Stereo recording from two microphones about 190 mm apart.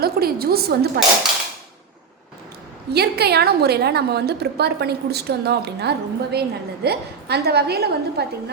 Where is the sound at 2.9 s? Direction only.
60° right (ahead or behind).